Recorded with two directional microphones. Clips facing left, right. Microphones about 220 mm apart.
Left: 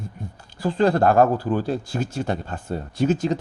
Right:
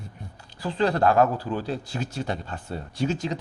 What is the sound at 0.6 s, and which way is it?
Speech, 50° left (ahead or behind).